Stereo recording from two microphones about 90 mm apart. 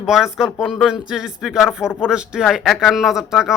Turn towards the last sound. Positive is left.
turn(degrees=-5)  # may be behind; listen again after turning